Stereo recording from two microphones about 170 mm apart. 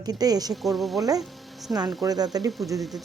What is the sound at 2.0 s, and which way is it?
Speech, 20° right (ahead or behind).